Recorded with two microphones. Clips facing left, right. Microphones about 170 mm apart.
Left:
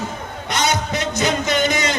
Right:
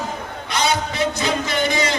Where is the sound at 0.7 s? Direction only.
20° left (ahead or behind).